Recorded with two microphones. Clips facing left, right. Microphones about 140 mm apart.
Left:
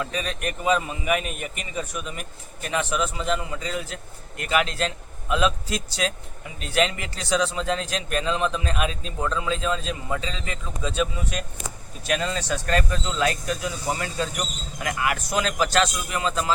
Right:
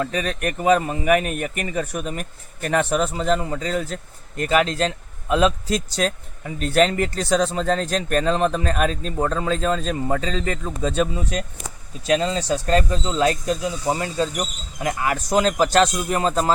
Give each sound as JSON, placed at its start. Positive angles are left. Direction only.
{"t": 0.0, "sound": "a man's voice", "side_deg": -50}